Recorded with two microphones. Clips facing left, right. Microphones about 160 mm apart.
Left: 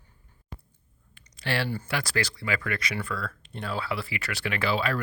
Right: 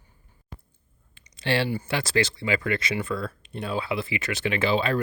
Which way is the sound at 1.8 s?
25° right (ahead or behind).